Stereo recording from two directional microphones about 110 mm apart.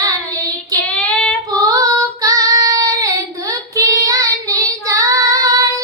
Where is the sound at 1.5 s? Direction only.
35° right (ahead or behind).